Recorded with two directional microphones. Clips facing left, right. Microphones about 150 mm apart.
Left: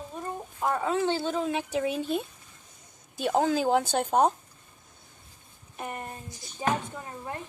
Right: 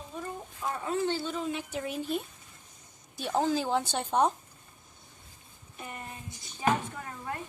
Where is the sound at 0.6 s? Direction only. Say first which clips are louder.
Left 4 dB; 70° left (ahead or behind); by 2.0 s 90° left.